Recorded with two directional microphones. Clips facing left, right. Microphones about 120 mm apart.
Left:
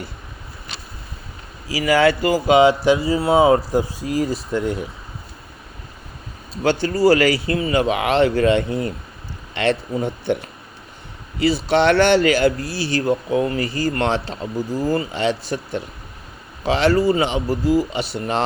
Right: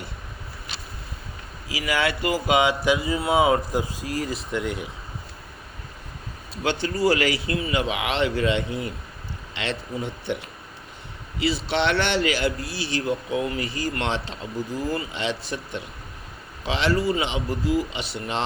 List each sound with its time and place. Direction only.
1.6 s speech: 40° left (ahead or behind)
6.8 s speech: 35° left (ahead or behind)
11.3 s speech: 45° left (ahead or behind)